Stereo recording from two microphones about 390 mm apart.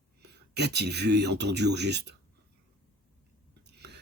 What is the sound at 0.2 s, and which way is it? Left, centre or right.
Speech, right.